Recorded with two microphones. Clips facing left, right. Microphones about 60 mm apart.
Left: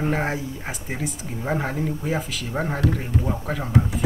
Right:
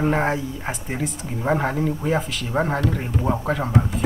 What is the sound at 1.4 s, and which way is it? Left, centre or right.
A man's voice, centre.